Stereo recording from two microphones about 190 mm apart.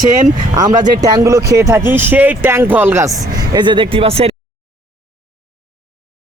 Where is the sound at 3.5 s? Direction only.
25° right (ahead or behind).